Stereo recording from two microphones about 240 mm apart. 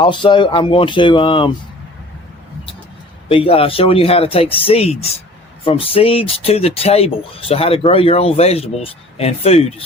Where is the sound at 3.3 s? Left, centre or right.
Left.